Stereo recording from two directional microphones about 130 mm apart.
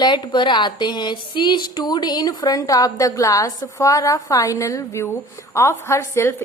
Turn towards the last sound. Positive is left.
turn(degrees=20)  # may be behind; listen again after turning